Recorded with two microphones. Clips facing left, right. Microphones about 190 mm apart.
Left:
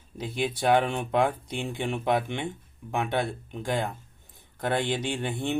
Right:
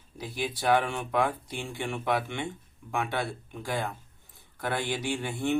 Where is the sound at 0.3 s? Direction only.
25° left (ahead or behind).